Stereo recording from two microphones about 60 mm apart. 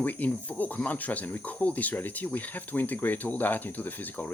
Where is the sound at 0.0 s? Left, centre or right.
Left.